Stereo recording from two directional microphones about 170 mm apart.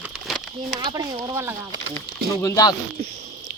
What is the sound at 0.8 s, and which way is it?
Speech, 25° right (ahead or behind).